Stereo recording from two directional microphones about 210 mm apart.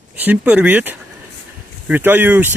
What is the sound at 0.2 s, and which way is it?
Speech, 10° right (ahead or behind).